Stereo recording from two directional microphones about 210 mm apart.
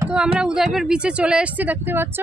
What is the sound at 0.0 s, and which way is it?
Speech, 5° right (ahead or behind).